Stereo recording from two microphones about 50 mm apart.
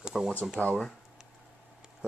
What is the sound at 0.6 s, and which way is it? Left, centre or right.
Speech, left.